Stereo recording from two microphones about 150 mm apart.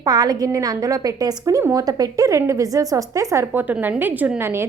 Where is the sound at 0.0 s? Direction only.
25° right (ahead or behind).